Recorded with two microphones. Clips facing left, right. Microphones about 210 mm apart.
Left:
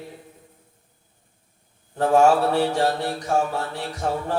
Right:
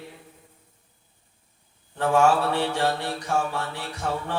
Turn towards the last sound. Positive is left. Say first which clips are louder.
# left 4 dB
turn(degrees=40)  # may be behind; listen again after turning